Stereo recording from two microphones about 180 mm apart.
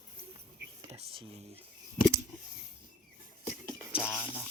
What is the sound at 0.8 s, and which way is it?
Speech, 35° right (ahead or behind).